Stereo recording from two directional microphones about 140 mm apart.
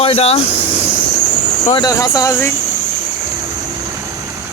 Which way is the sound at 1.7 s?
25° left (ahead or behind).